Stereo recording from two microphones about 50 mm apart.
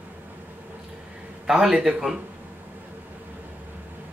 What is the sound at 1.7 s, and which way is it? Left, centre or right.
Speech, centre.